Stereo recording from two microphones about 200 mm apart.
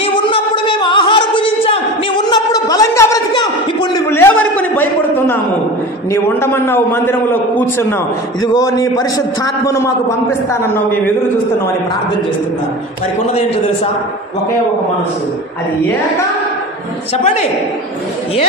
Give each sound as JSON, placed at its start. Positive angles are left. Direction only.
{"t": 0.0, "sound": "a sound", "side_deg": 25}
{"t": 6.2, "sound": "a man's voice", "side_deg": 10}
{"t": 17.2, "sound": "speech", "side_deg": 35}